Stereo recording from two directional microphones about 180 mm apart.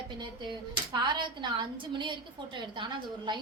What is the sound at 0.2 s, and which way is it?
A woman's voice, 25° right (ahead or behind).